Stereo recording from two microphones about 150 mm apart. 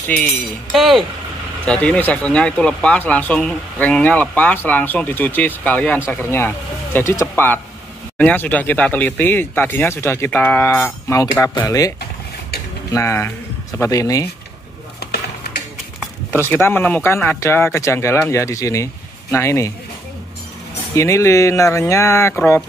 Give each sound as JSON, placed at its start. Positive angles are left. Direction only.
{"t": 0.7, "sound": "speech", "side_deg": 0}
{"t": 12.9, "sound": "speech", "side_deg": 15}
{"t": 16.3, "sound": "speech", "side_deg": 15}
{"t": 20.9, "sound": "speech", "side_deg": 20}